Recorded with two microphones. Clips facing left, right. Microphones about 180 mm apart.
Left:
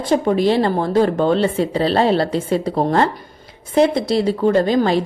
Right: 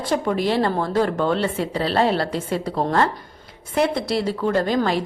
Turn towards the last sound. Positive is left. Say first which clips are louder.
# left 5 dB
turn(degrees=20)  # may be behind; listen again after turning